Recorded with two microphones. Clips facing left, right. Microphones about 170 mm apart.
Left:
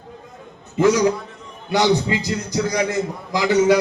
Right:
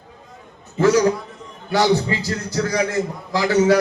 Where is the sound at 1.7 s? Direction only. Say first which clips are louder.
Even; 15° left (ahead or behind).